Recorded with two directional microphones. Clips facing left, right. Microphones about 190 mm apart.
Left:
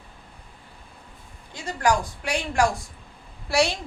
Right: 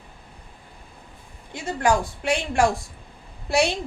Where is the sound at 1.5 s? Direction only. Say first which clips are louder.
Right 2 dB; 25° right (ahead or behind).